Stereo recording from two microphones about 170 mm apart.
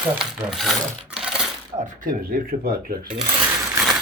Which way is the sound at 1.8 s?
55° right (ahead or behind).